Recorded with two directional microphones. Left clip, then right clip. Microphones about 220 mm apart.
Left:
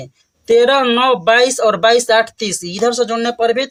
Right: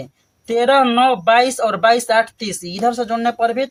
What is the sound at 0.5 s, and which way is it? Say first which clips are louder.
Speech: left 2 dB; 50° left (ahead or behind).